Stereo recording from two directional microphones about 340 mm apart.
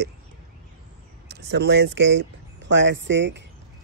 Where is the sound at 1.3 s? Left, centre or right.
Right.